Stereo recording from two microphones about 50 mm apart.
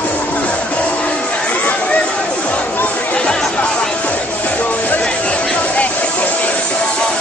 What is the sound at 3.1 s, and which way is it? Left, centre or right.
Chatter, left.